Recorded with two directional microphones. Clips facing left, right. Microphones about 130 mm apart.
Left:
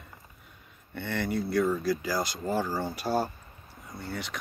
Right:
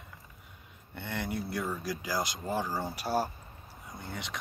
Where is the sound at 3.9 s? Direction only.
20° right (ahead or behind).